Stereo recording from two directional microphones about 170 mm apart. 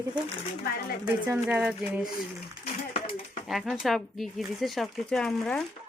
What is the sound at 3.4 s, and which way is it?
Speech, centre (ahead or behind).